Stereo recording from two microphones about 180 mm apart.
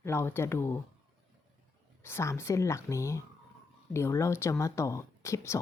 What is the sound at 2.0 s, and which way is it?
A woman's voice, 15° left (ahead or behind).